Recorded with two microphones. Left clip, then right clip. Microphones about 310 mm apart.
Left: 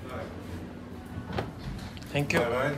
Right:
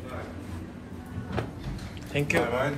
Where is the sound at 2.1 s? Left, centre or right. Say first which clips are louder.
Right 2 dB; centre.